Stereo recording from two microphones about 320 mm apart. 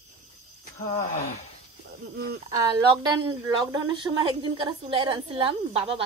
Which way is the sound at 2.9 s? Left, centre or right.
Centre.